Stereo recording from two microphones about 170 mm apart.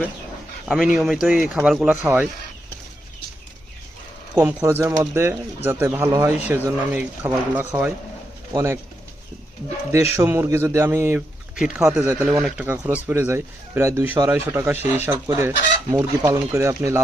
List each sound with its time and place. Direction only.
0.6 s a sound: centre (ahead or behind)
0.9 s speech: 5° right (ahead or behind)
4.4 s a man's voice: 15° right (ahead or behind)
9.9 s a man's voice: 15° right (ahead or behind)